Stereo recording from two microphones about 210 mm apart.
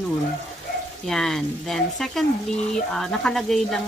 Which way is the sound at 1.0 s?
Centre (ahead or behind).